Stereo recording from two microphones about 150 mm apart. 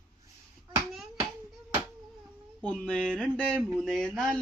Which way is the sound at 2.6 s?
5° left (ahead or behind).